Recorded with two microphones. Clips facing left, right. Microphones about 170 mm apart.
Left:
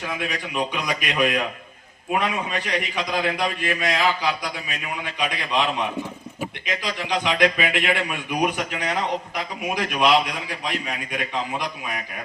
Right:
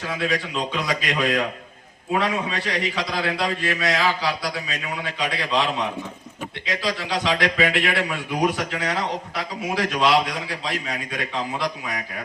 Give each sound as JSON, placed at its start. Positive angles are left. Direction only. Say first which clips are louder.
{"t": 0.1, "sound": "a man's voice", "louder": "right 6 dB", "side_deg": 15}
{"t": 5.3, "sound": "a man's voice", "louder": "right 2 dB", "side_deg": 20}
{"t": 6.7, "sound": "a man's voice", "louder": "right 2 dB", "side_deg": 20}